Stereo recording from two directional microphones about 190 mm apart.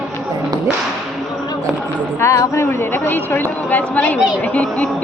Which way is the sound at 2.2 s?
15° left (ahead or behind).